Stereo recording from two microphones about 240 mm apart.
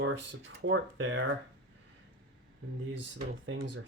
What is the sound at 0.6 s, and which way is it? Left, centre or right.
Speech, right.